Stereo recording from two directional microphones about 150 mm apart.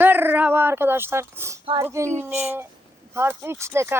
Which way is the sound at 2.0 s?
50° right (ahead or behind).